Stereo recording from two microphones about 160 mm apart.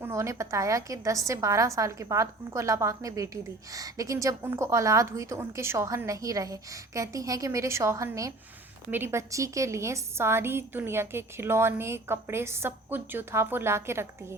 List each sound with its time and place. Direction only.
0.0 s a woman's voice: 20° right (ahead or behind)